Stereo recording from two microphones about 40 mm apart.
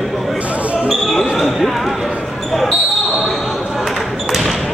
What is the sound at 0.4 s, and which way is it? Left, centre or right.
Basketball bounce, right.